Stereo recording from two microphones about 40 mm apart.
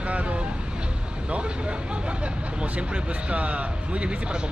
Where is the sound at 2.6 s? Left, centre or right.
Right.